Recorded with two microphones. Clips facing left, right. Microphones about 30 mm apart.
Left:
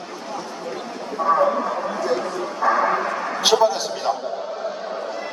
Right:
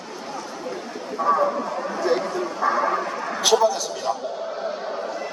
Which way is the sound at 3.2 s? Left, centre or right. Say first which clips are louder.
Left 1 dB; centre.